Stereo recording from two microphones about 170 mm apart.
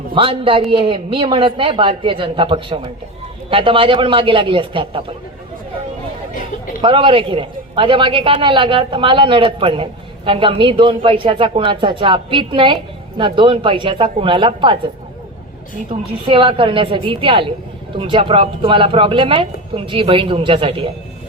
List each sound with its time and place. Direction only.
0.1 s a man's voice: 30° right (ahead or behind)
6.8 s a man's voice: 30° right (ahead or behind)
15.9 s a man's voice: 30° right (ahead or behind)